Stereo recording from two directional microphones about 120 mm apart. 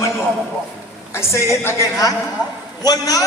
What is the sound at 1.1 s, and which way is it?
A man's voice, 20° left (ahead or behind).